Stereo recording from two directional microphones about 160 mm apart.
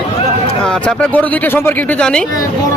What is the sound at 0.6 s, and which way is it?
Speech, 10° left (ahead or behind).